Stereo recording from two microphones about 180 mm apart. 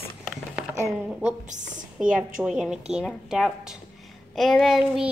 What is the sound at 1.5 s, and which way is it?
Speech, 45° right (ahead or behind).